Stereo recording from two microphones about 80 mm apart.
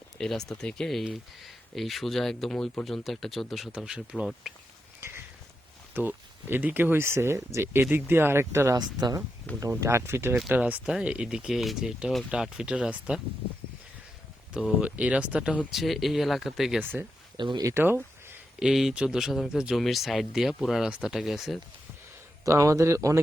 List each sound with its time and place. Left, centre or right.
0.2 s speech: centre
4.9 s a sound: right
5.9 s speech: right
8.7 s speech: right
9.6 s speech: right
10.5 s speech: centre
14.5 s speech: centre
15.7 s speech: centre
17.3 s speech: right
17.7 s a sound: right
18.6 s speech: centre
22.4 s speech: right